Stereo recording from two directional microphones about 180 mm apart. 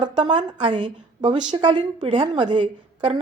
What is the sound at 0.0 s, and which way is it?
A woman's voice, 25° right (ahead or behind).